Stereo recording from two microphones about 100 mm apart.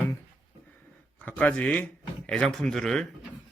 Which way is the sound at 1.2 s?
10° left (ahead or behind).